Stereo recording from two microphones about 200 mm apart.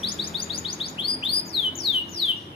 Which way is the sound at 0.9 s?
25° left (ahead or behind).